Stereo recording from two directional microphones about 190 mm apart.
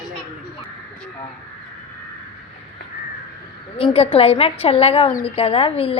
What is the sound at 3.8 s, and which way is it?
A woman's voice, 30° left (ahead or behind).